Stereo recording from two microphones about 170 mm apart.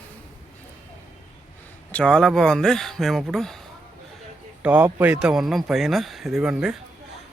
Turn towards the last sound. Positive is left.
turn(degrees=-5)  # may be behind; listen again after turning